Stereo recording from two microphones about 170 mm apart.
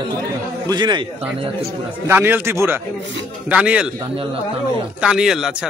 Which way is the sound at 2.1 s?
10° right (ahead or behind).